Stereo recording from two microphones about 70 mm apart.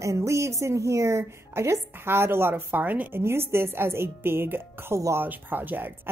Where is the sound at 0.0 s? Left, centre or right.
Right.